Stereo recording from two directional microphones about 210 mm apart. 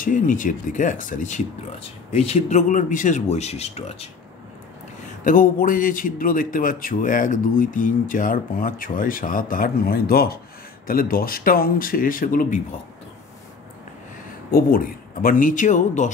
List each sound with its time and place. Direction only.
0.0 s a man's voice: 40° left (ahead or behind)
5.2 s a man's voice: 40° left (ahead or behind)
14.5 s a man's voice: 45° left (ahead or behind)